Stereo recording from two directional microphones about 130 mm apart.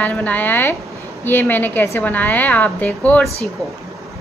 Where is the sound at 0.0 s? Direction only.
15° left (ahead or behind).